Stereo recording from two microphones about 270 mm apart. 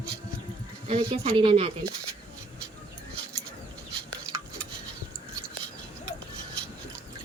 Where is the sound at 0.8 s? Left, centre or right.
Right.